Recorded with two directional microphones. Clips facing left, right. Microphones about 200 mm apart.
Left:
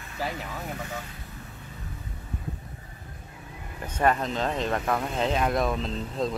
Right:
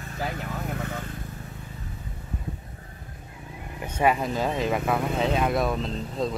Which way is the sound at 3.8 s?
10° right (ahead or behind).